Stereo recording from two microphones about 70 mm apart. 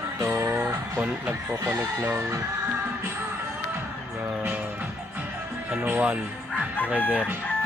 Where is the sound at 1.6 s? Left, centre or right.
Right.